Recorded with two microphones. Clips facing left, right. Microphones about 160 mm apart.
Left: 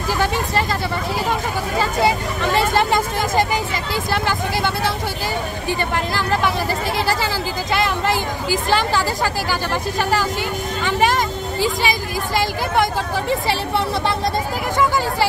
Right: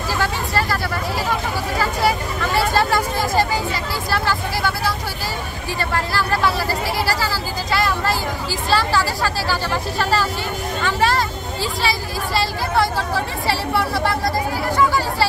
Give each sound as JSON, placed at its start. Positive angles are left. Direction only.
{"t": 0.2, "sound": "vehicle", "side_deg": 20}
{"t": 1.8, "sound": "vehicle", "side_deg": 20}
{"t": 5.7, "sound": "speech", "side_deg": 20}
{"t": 7.7, "sound": "speech", "side_deg": 20}
{"t": 10.8, "sound": "vehicle", "side_deg": 15}
{"t": 12.4, "sound": "speech", "side_deg": 20}